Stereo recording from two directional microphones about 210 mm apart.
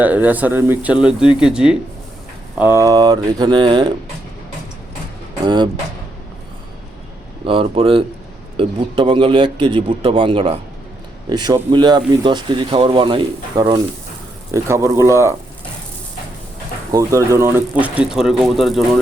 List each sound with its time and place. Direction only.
0.0 s speech: 10° right (ahead or behind)
7.4 s speech: 25° right (ahead or behind)
16.9 s speech: 15° right (ahead or behind)